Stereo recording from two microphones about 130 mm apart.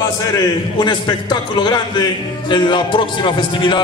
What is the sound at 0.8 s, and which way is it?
Speech, 35° left (ahead or behind).